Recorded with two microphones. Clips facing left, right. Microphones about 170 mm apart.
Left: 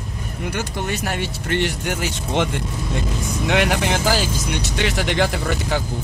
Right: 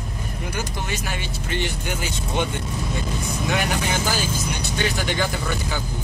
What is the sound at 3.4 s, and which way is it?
Speech, 80° left.